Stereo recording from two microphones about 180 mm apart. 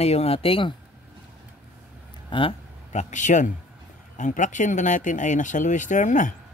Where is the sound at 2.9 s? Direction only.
40° left (ahead or behind).